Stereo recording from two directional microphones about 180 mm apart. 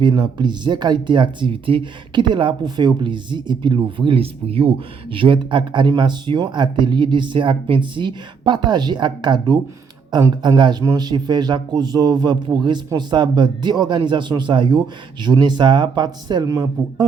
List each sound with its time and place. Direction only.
0.0 s speech: 25° right (ahead or behind)